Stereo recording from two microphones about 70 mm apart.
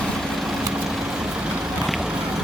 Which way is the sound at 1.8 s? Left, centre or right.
Centre.